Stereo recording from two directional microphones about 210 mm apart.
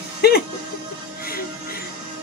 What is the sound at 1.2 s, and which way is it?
Music, 45° left (ahead or behind).